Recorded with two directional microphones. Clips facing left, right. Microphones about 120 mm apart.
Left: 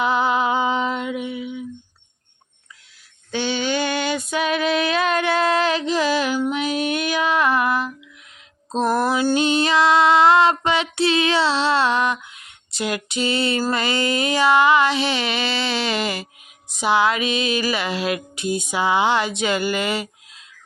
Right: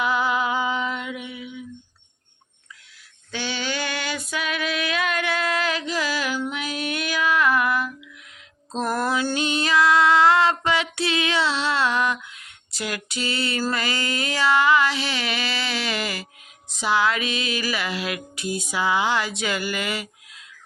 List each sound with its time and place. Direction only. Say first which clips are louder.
0.0 s music: left 3 dB; 25° left (ahead or behind)
3.3 s female singing: left 6 dB; 25° left (ahead or behind)
8.7 s music: left 4 dB; 20° left (ahead or behind)
9.3 s female singing: left 4 dB; 25° left (ahead or behind)
16.6 s music: left 3 dB; 20° left (ahead or behind)